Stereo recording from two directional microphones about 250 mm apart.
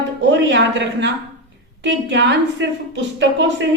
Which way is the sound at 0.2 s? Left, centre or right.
Right.